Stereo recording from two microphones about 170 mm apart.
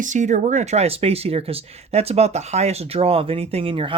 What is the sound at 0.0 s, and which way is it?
Speech, 45° right (ahead or behind).